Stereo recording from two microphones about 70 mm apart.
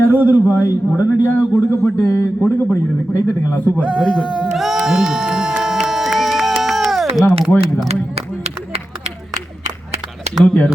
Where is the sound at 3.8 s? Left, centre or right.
Centre.